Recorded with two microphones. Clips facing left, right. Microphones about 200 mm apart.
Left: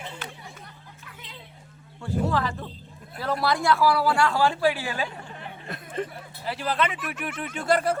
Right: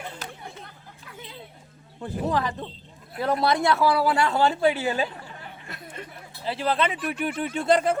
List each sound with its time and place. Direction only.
2.0 s speech: 20° right (ahead or behind)
6.4 s speech: 30° right (ahead or behind)